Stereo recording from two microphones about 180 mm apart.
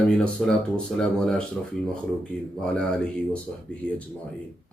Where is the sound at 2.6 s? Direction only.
5° left (ahead or behind).